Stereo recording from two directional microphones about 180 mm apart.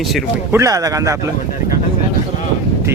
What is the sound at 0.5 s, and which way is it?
Speech, 20° right (ahead or behind).